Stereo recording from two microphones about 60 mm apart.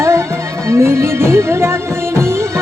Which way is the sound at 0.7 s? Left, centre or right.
Right.